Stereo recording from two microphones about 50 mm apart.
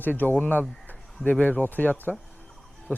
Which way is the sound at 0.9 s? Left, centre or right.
Left.